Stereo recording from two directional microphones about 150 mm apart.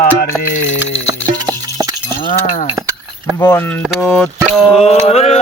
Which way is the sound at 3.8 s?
5° left (ahead or behind).